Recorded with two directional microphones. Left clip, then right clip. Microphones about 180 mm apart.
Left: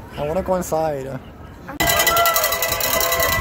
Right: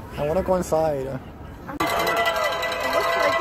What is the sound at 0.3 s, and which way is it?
Speech, 15° left (ahead or behind).